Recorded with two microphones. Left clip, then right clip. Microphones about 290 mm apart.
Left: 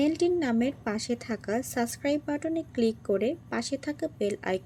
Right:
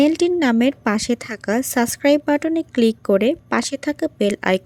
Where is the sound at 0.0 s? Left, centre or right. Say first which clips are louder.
Right 9 dB; right.